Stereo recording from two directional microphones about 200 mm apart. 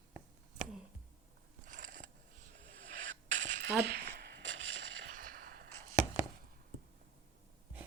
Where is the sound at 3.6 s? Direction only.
60° right (ahead or behind).